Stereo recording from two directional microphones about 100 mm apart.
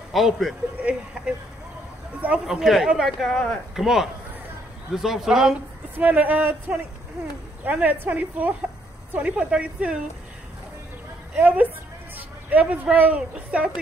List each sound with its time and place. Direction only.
0.1 s speech: centre (ahead or behind)
2.2 s speech: 10° right (ahead or behind)
5.9 s a woman's voice: 15° right (ahead or behind)
7.6 s a woman's voice: 15° right (ahead or behind)
11.3 s a woman's voice: 15° right (ahead or behind)